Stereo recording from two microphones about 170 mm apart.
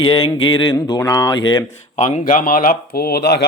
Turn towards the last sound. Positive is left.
turn(degrees=75)  # may be behind; listen again after turning